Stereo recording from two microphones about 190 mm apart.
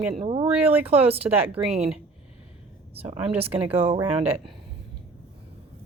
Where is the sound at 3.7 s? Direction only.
30° right (ahead or behind).